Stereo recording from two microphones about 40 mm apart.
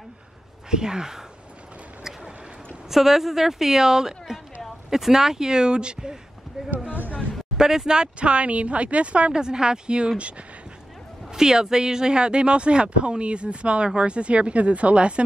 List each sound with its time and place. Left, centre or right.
0.7 s a woman's voice: centre
2.9 s a woman's voice: centre
6.9 s a sound: right
7.5 s speech: centre; by 9.4 s right
9.4 s speech: centre
11.3 s speech: centre